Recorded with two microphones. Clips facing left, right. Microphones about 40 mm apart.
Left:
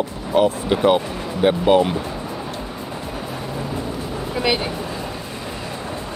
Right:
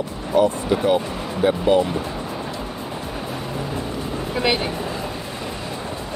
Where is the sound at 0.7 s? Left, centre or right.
Left.